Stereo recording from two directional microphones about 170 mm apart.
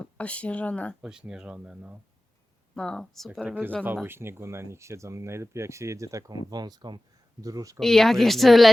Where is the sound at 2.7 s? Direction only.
5° left (ahead or behind).